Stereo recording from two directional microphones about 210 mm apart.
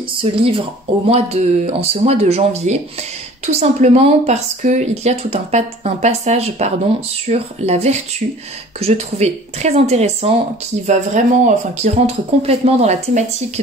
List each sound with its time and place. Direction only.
0.2 s speech: 25° right (ahead or behind)